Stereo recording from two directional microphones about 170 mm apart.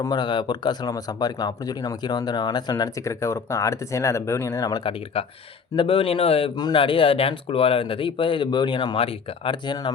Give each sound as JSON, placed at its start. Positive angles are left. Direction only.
{"t": 0.0, "sound": "speech", "side_deg": 25}